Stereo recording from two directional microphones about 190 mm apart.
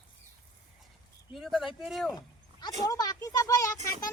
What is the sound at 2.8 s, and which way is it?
A child's voice, 20° left (ahead or behind).